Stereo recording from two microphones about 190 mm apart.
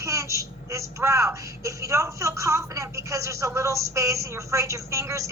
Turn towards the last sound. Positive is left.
turn(degrees=-15)  # may be behind; listen again after turning